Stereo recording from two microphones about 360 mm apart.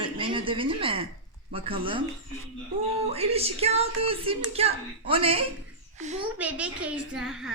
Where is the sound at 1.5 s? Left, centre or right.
Centre.